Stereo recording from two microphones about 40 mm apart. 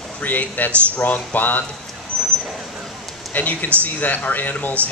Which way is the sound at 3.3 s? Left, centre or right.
Left.